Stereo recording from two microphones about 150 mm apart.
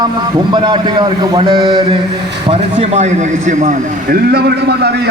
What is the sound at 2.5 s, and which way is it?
Speech, 45° right (ahead or behind).